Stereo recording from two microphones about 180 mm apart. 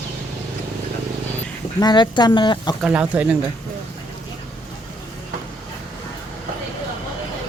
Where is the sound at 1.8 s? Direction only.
20° left (ahead or behind).